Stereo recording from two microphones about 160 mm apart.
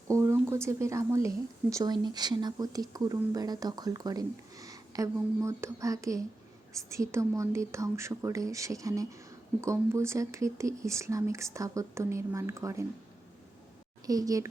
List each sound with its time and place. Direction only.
0.1 s speech: 20° right (ahead or behind)
14.1 s speech: 20° right (ahead or behind)